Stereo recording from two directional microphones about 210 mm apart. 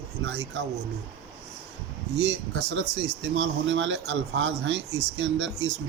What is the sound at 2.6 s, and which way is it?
Speech, 55° right (ahead or behind).